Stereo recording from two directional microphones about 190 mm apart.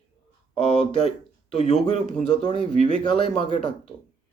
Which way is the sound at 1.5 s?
35° left (ahead or behind).